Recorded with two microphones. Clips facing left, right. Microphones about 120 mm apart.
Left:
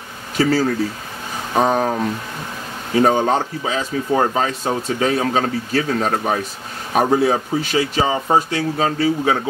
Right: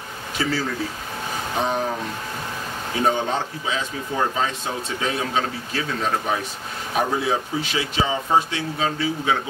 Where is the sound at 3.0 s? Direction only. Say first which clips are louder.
Left 7 dB; 45° left (ahead or behind).